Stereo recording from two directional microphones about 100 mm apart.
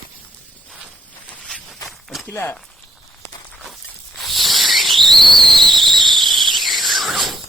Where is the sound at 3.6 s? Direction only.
Centre (ahead or behind).